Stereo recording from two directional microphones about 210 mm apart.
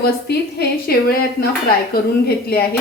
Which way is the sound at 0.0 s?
50° left (ahead or behind).